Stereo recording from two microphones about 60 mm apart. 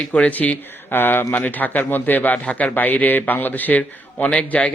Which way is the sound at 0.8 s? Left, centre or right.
Left.